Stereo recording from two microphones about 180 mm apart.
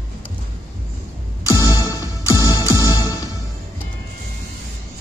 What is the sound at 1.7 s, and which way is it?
Music, 20° left (ahead or behind).